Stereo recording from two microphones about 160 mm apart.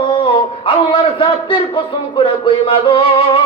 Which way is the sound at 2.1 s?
30° left (ahead or behind).